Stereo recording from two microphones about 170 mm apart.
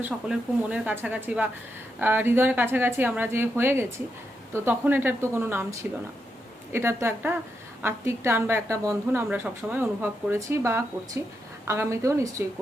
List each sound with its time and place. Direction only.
0.0 s a woman's voice: 10° right (ahead or behind)